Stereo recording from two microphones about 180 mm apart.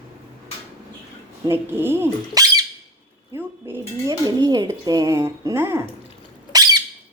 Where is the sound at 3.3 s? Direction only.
15° right (ahead or behind).